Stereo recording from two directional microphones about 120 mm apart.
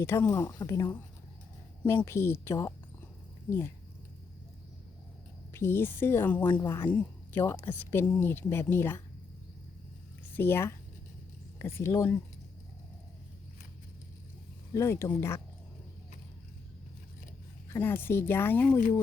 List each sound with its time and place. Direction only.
0.0 s a woman's voice: 20° left (ahead or behind)
5.5 s a woman's voice: 20° left (ahead or behind)
10.3 s a woman's voice: 20° left (ahead or behind)
14.7 s speech: 25° left (ahead or behind)
17.7 s speech: 20° left (ahead or behind)